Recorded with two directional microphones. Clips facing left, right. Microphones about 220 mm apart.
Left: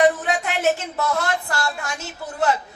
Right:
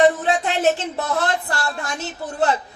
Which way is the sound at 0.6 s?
35° right (ahead or behind).